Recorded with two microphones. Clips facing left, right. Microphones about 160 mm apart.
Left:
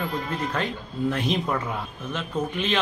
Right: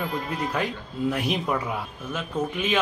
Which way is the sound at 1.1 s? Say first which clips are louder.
Even; 15° right (ahead or behind).